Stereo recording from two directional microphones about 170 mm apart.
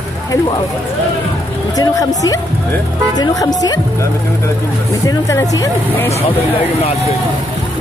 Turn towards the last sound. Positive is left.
turn(degrees=15)  # may be behind; listen again after turning